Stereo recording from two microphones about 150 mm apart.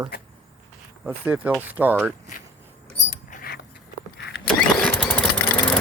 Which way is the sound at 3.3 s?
75° left (ahead or behind).